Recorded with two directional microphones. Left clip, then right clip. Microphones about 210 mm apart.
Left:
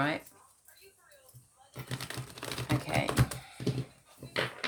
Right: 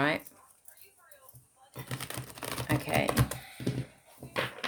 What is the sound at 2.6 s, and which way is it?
Typing, 50° right (ahead or behind).